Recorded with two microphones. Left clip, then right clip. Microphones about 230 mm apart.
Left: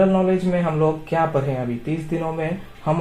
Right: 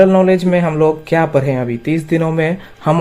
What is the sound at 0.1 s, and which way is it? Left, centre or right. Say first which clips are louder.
Speech: right 8 dB; right.